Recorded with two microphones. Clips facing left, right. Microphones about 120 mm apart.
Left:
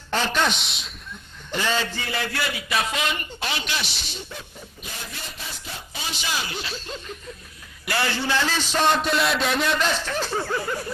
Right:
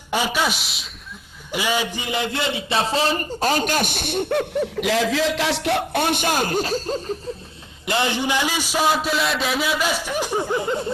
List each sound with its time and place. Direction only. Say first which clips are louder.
0.1 s a man's voice: right 1 dB; 10° right (ahead or behind); by 7.2 s 40° right (ahead or behind)
7.8 s a man's voice: right 4 dB; 20° right (ahead or behind)